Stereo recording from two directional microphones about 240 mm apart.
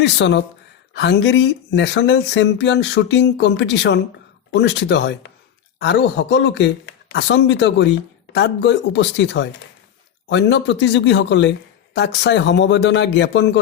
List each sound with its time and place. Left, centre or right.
0.0 s speech: left